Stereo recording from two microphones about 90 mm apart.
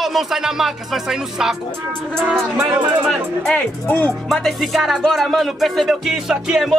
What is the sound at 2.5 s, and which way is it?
Speech, 15° right (ahead or behind).